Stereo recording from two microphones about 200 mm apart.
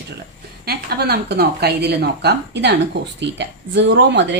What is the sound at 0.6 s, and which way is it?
A woman's voice, 50° right (ahead or behind).